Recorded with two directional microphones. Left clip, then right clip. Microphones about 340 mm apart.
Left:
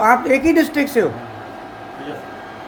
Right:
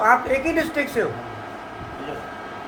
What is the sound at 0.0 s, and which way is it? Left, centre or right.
A woman's voice, left.